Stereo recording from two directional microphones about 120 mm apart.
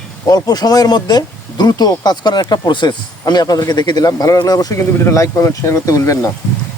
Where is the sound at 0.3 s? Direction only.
30° left (ahead or behind).